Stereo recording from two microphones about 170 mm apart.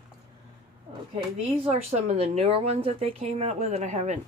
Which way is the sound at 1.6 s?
40° right (ahead or behind).